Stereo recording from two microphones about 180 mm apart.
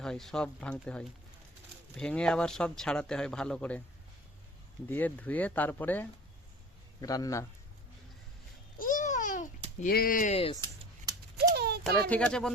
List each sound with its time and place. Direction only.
0.0 s speech: 5° left (ahead or behind)
4.9 s a man's voice: 10° left (ahead or behind)
8.8 s babbling: 45° left (ahead or behind)
9.8 s speech: 55° left (ahead or behind)
11.1 s a sound: 20° right (ahead or behind)
11.5 s a sound: 60° right (ahead or behind)
11.8 s speech: 5° left (ahead or behind)